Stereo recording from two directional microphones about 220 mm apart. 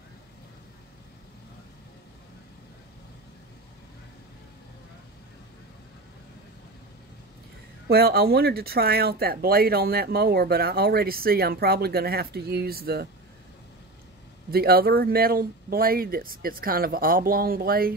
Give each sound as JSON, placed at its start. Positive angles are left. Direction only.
{"t": 7.9, "sound": "speech", "side_deg": -45}
{"t": 14.5, "sound": "speech", "side_deg": -45}